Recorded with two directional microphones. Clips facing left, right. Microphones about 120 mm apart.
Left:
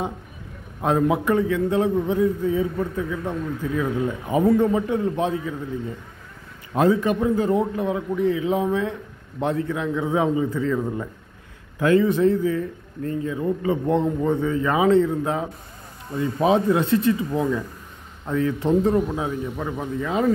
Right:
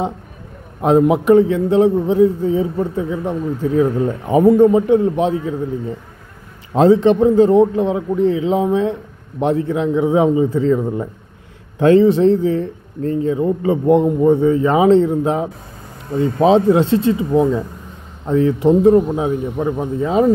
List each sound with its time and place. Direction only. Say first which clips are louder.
0.7 s a man's voice: right 7 dB; 20° right (ahead or behind)
6.7 s a man's voice: right 8 dB; 25° right (ahead or behind)
13.7 s a man's voice: right 8 dB; 15° right (ahead or behind)